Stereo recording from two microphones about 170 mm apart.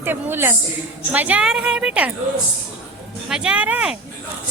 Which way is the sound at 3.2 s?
5° right (ahead or behind).